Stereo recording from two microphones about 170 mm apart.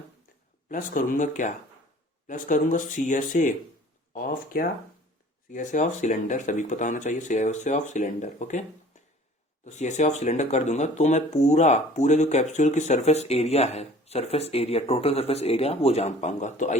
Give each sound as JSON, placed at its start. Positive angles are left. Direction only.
{"t": 0.7, "sound": "speech", "side_deg": 50}
{"t": 9.6, "sound": "speech", "side_deg": 45}